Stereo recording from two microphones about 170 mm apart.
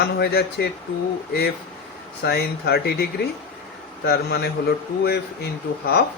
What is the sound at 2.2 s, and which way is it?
A man's voice, 70° left (ahead or behind).